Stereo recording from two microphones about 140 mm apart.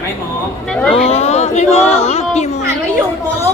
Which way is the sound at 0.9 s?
45° left (ahead or behind).